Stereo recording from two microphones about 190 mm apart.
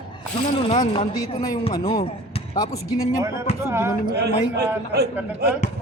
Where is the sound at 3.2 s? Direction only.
15° right (ahead or behind).